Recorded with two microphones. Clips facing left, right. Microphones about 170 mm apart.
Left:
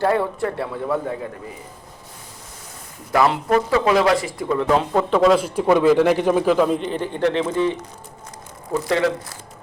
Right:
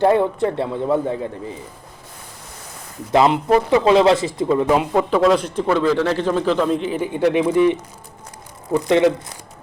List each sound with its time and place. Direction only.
0.0 s speech: 20° right (ahead or behind)
3.1 s speech: 20° right (ahead or behind)
4.7 s a man's voice: 10° right (ahead or behind)